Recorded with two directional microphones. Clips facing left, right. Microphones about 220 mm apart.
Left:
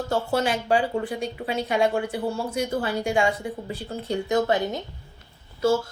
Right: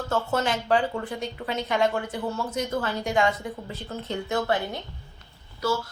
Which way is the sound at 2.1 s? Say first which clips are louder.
Left 3 dB; 30° left (ahead or behind).